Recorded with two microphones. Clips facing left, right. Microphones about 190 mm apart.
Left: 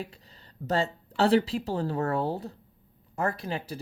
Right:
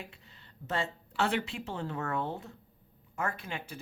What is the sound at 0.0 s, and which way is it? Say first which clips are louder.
Speech: left 8 dB; 35° left (ahead or behind).